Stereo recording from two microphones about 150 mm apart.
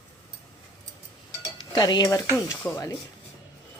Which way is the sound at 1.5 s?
30° left (ahead or behind).